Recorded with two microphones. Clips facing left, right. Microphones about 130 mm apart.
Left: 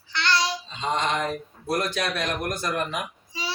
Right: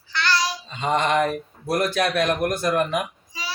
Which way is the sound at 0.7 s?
60° right (ahead or behind).